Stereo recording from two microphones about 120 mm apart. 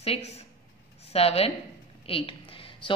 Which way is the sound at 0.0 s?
55° left (ahead or behind).